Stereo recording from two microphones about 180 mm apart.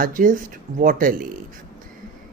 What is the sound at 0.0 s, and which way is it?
Speech, 50° right (ahead or behind).